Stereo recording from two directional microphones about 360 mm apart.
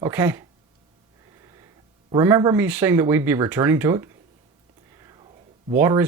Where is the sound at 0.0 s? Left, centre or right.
Centre.